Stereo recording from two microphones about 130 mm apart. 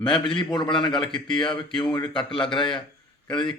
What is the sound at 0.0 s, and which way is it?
A man's voice, 40° left (ahead or behind).